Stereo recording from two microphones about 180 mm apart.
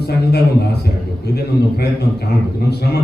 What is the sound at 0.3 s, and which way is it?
Speech, 65° left (ahead or behind).